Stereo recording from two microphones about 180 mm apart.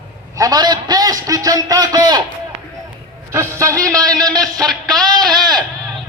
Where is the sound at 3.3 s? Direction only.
15° right (ahead or behind).